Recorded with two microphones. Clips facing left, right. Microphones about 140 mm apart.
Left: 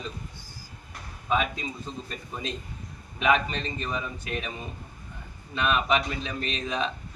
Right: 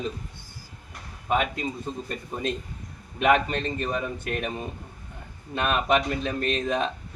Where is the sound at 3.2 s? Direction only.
55° right (ahead or behind).